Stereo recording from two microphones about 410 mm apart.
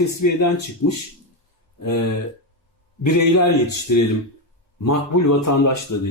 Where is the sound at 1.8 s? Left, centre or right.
Left.